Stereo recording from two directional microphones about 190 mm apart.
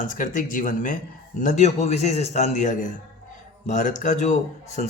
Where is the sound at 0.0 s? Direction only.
45° left (ahead or behind).